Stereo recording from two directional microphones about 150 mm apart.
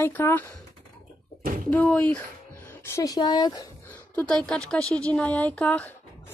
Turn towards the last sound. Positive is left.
turn(degrees=10)  # may be behind; listen again after turning